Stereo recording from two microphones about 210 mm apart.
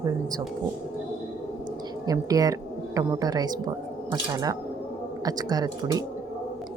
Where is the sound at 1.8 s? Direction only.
20° right (ahead or behind).